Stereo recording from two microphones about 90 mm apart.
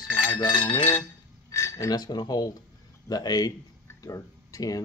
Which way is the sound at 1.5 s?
35° left (ahead or behind).